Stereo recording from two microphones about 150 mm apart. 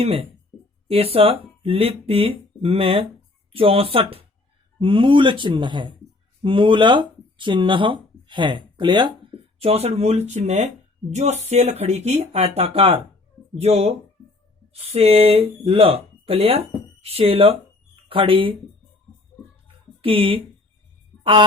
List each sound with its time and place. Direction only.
0.0 s speech: 40° right (ahead or behind)
20.0 s speech: 35° right (ahead or behind)